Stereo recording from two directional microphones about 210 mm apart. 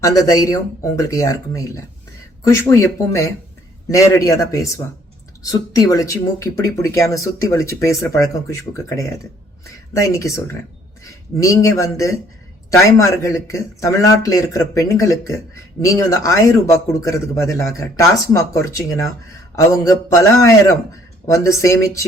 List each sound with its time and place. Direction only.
0.0 s speech: 15° left (ahead or behind)